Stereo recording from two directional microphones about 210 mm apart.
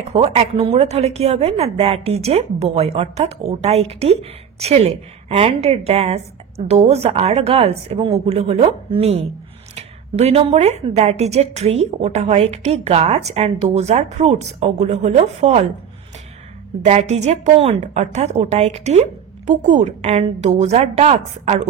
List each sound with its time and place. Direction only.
0.1 s a woman's voice: 30° right (ahead or behind)
16.8 s speech: 30° right (ahead or behind)